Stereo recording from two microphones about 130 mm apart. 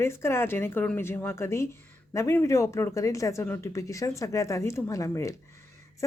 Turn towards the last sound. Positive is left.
turn(degrees=25)  # may be behind; listen again after turning